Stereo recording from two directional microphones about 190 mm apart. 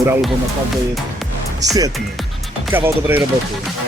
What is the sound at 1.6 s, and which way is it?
Speech, 20° right (ahead or behind).